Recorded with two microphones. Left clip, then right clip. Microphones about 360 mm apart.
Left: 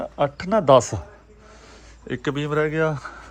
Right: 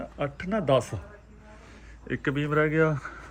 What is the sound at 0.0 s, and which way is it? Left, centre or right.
Speech, centre.